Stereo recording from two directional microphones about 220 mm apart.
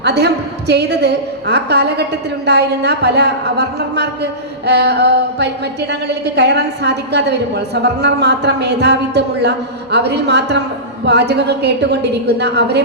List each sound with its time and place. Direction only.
0.0 s a woman's voice: 50° right (ahead or behind)